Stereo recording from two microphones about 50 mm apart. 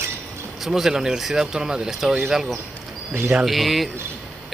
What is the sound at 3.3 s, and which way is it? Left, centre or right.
Speech, centre.